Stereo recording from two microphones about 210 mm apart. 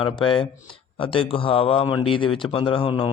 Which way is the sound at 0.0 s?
25° left (ahead or behind).